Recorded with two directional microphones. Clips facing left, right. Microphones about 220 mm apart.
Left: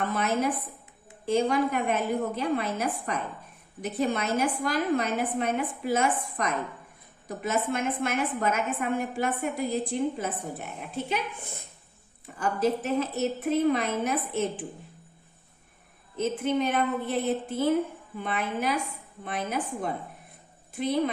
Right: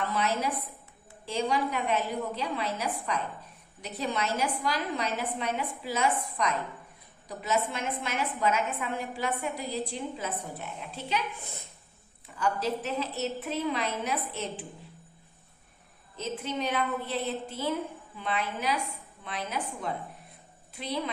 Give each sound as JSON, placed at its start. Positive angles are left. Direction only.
{"t": 0.0, "sound": "a woman's voice", "side_deg": 50}
{"t": 12.4, "sound": "a woman's voice", "side_deg": 50}
{"t": 16.1, "sound": "a woman's voice", "side_deg": 55}